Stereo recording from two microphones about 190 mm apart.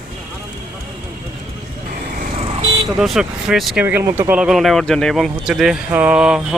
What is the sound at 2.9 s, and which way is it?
Speech, centre (ahead or behind).